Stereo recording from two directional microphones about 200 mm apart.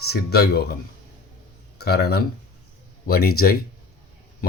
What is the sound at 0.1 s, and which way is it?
Speech, 50° left (ahead or behind).